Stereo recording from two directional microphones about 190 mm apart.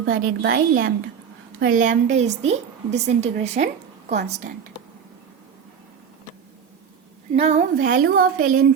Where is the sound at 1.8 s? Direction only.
40° right (ahead or behind).